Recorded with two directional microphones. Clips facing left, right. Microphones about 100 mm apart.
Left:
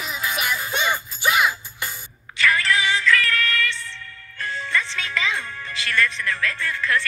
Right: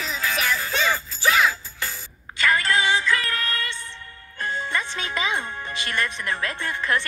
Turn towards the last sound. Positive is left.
turn(degrees=-20)  # may be behind; listen again after turning